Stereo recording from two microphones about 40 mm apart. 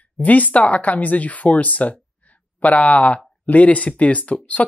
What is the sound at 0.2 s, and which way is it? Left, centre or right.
Speech, left.